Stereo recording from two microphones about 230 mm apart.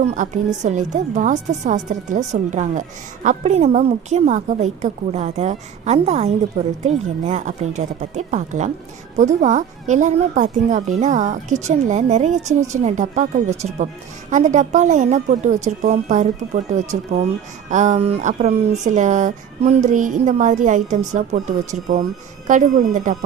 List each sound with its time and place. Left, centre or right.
0.0 s a woman's voice: right
17.7 s speech: right